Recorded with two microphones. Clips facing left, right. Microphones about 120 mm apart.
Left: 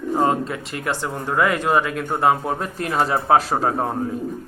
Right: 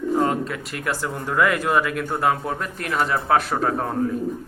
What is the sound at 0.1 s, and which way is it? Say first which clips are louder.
Speech: left 2 dB; 30° left (ahead or behind).